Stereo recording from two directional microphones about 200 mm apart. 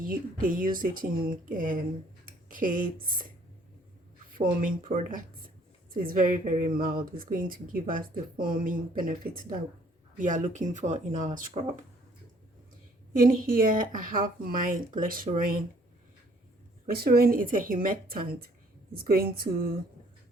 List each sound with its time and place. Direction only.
0.0 s a woman's voice: 45° right (ahead or behind)
2.2 s a sound: 45° right (ahead or behind)
4.3 s a woman's voice: 45° right (ahead or behind)
13.1 s a woman's voice: 45° right (ahead or behind)
16.8 s a woman's voice: 50° right (ahead or behind)